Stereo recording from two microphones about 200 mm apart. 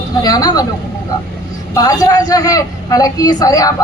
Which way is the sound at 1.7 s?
15° left (ahead or behind).